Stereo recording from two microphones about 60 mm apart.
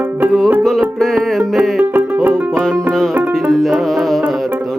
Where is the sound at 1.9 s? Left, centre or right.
Right.